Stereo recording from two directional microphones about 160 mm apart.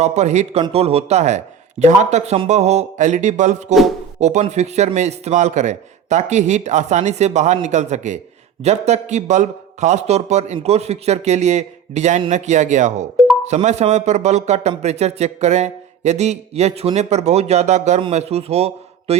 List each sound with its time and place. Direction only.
0.0 s a man's voice: 45° right (ahead or behind)